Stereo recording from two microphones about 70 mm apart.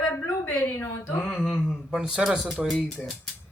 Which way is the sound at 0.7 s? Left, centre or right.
Left.